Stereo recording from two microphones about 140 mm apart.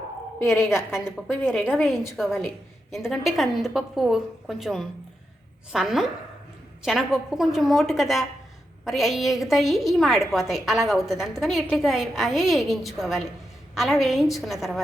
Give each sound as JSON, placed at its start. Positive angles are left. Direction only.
{"t": 1.5, "sound": "a woman's voice", "side_deg": -5}